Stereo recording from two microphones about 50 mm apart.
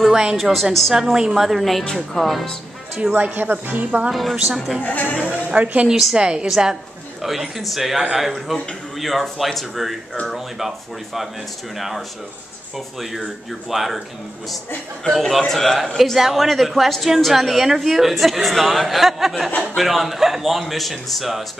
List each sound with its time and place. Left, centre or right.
0.0 s a woman's voice: centre
1.1 s a woman's voice: centre
1.4 s a woman's voice: centre
1.9 s speech: centre
3.1 s speech: right
3.7 s speech: right
4.1 s a woman's voice: centre
4.8 s speech: left
5.3 s speech: right
5.9 s a woman's voice: centre
6.1 s a woman's voice: centre
13.7 s a woman's voice: centre
15.0 s a woman's voice: centre